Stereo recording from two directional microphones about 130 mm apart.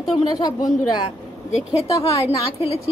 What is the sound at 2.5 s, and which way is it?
Speech, 50° left (ahead or behind).